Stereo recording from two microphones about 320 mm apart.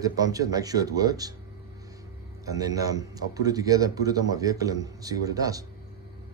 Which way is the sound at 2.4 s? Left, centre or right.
Centre.